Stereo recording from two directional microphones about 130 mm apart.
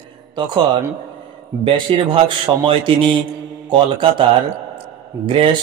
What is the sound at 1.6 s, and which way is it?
Speech, 40° right (ahead or behind).